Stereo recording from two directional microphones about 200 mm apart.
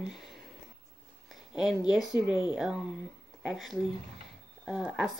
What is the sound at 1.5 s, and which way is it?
Speech, centre (ahead or behind).